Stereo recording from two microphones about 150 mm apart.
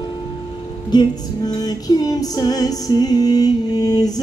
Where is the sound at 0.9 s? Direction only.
25° left (ahead or behind).